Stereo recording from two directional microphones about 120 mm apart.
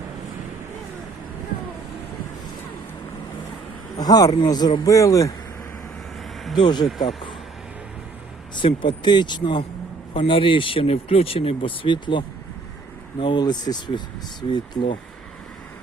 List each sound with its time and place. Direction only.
3.9 s speech: 30° left (ahead or behind)
6.6 s speech: 40° left (ahead or behind)
8.5 s speech: 40° left (ahead or behind)